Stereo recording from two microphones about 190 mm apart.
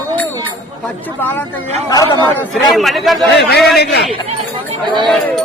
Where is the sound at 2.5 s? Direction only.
Centre (ahead or behind).